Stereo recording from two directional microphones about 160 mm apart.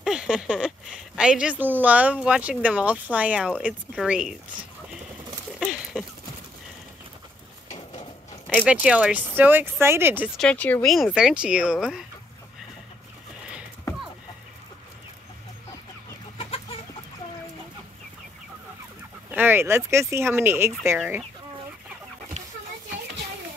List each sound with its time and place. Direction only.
0.0 s speech: 5° right (ahead or behind)
5.6 s a sound: 5° right (ahead or behind)
8.6 s speech: 5° right (ahead or behind)
10.3 s speech: 5° left (ahead or behind)
16.3 s chicken: 35° left (ahead or behind)
19.3 s speech: 15° right (ahead or behind)